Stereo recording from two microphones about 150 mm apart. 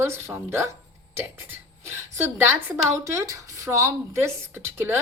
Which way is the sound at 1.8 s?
15° right (ahead or behind).